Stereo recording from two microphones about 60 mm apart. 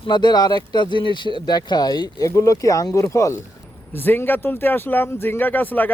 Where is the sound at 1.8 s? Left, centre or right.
Left.